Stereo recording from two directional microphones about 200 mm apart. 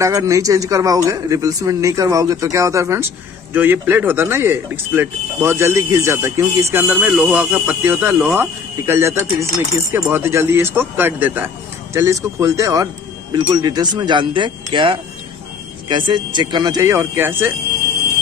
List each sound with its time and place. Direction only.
0.0 s speech: 15° right (ahead or behind)